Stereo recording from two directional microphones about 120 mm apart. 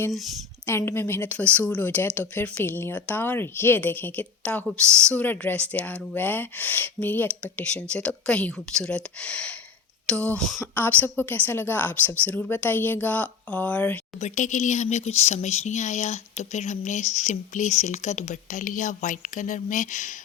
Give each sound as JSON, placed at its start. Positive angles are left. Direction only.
{"t": 0.7, "sound": "speech", "side_deg": 20}
{"t": 14.2, "sound": "speech", "side_deg": 90}